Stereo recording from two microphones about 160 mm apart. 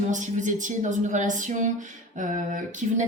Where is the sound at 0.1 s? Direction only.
50° right (ahead or behind).